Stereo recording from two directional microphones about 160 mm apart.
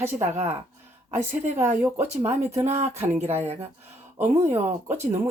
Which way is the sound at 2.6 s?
45° right (ahead or behind).